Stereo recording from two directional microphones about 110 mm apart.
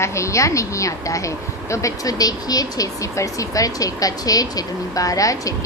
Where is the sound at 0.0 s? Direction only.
25° left (ahead or behind).